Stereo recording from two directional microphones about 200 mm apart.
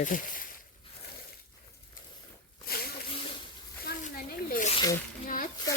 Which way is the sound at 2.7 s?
50° left (ahead or behind).